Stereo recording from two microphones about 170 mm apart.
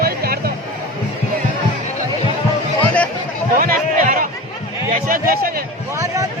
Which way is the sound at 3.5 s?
55° right (ahead or behind).